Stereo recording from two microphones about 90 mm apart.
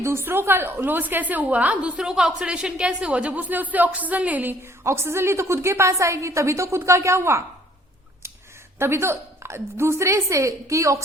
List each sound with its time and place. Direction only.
0.0 s a woman's voice: 25° right (ahead or behind)
4.8 s a woman's voice: 30° right (ahead or behind)
8.8 s a woman's voice: 30° right (ahead or behind)